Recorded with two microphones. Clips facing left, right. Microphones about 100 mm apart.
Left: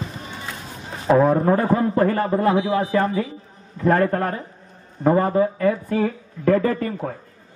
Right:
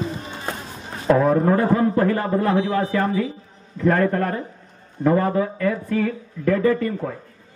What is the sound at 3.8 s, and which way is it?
Speech, 40° left (ahead or behind).